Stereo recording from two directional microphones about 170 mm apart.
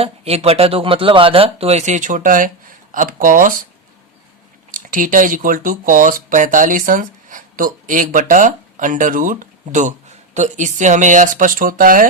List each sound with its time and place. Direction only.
0.0 s speech: 35° right (ahead or behind); by 3.6 s 55° right (ahead or behind)
4.8 s speech: 55° right (ahead or behind)